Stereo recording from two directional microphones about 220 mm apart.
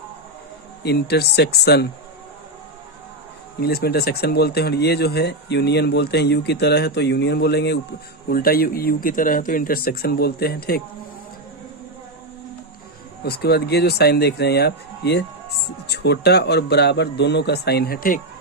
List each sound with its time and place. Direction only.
0.8 s speech: 45° left (ahead or behind)
3.6 s speech: 45° left (ahead or behind)
13.2 s speech: 45° left (ahead or behind)